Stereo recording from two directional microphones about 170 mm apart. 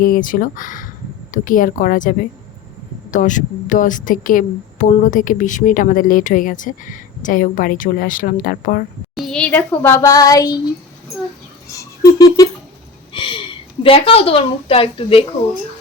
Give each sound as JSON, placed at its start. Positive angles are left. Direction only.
{"t": 0.0, "sound": "a woman's voice", "side_deg": 55}
{"t": 9.1, "sound": "speech", "side_deg": 0}
{"t": 11.7, "sound": "a sound", "side_deg": 20}
{"t": 13.1, "sound": "a woman's voice", "side_deg": 30}